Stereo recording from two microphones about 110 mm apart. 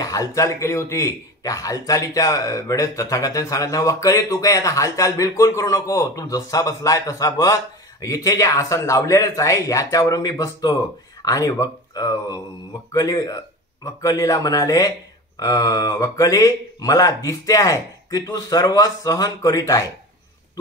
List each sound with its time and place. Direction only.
0.0 s a man's voice: 30° left (ahead or behind)